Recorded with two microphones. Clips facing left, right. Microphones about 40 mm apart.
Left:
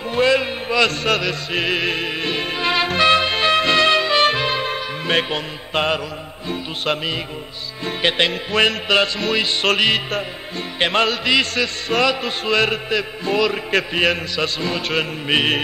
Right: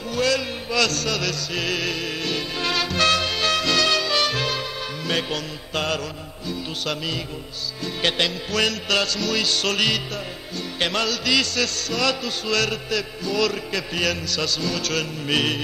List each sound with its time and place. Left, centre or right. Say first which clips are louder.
0.1 s music: left 5 dB; left
6.5 s chant: left 5 dB; left
8.0 s music: left 4 dB; left
13.7 s chant: left 6 dB; left